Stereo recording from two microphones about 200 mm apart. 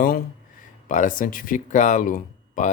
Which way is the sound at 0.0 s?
45° left (ahead or behind).